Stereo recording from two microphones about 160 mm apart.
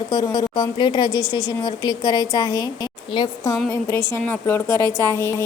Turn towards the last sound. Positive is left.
turn(degrees=15)  # may be behind; listen again after turning